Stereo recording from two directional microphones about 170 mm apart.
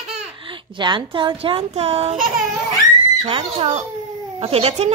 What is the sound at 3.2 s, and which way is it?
A child's voice, 30° right (ahead or behind).